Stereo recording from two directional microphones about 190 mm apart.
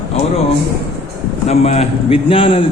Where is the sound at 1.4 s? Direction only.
35° left (ahead or behind).